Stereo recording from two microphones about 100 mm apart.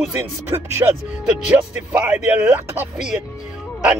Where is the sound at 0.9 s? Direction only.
5° right (ahead or behind).